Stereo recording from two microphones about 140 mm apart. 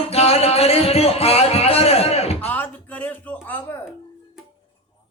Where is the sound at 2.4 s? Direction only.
10° left (ahead or behind).